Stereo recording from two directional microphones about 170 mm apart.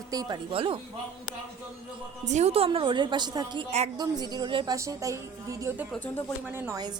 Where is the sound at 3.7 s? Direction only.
40° right (ahead or behind).